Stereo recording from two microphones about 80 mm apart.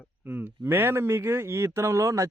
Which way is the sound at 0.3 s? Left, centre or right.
Right.